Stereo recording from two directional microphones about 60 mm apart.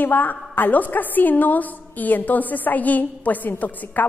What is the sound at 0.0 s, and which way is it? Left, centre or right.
A woman's voice, left.